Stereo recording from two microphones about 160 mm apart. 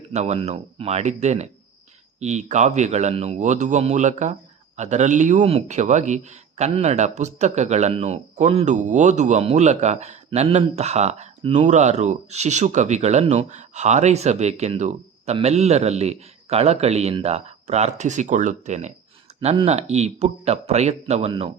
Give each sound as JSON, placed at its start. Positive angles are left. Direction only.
{"t": 0.1, "sound": "speech", "side_deg": -45}